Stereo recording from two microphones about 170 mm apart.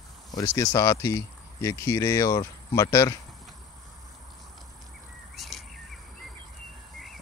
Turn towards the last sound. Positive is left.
turn(degrees=0)  # may be behind; listen again after turning